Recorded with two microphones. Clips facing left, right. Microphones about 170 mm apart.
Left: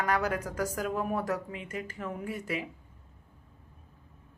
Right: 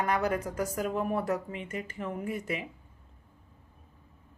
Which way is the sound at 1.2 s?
10° right (ahead or behind).